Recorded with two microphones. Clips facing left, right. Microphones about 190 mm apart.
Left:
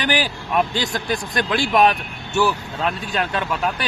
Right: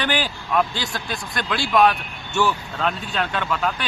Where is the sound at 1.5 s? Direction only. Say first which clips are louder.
Left 1 dB; 20° left (ahead or behind).